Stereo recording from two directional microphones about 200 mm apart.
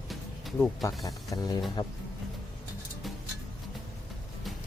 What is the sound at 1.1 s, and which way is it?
Speech, 20° left (ahead or behind).